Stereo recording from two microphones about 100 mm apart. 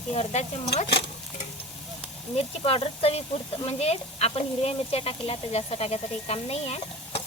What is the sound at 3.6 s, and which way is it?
Speech, 90° left.